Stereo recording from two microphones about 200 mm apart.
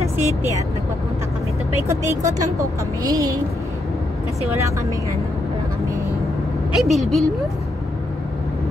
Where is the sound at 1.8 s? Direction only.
15° right (ahead or behind).